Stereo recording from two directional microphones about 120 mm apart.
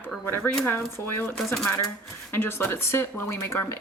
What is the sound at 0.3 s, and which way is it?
Speech, 15° left (ahead or behind).